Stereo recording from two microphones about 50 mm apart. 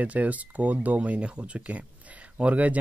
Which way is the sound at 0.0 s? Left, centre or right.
Right.